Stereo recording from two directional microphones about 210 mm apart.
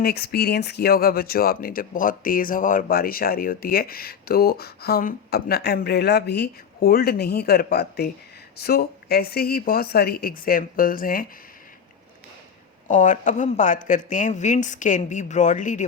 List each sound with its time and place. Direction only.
0.0 s speech: 50° left (ahead or behind)
12.9 s speech: 35° left (ahead or behind)